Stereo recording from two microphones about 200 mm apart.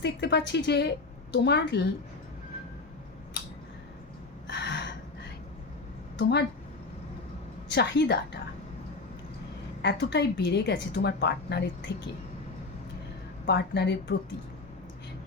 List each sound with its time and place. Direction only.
0.0 s a woman's voice: 60° left (ahead or behind)
4.4 s a sound: 60° left (ahead or behind)
7.7 s a woman's voice: 55° left (ahead or behind)
9.8 s a woman's voice: 60° left (ahead or behind)
13.5 s a woman's voice: 55° left (ahead or behind)